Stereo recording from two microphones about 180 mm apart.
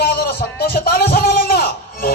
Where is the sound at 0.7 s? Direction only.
55° left (ahead or behind).